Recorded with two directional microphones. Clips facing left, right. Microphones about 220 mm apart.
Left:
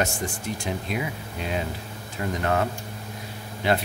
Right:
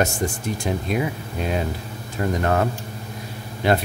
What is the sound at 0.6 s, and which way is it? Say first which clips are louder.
Speech: right 6 dB; 45° right (ahead or behind).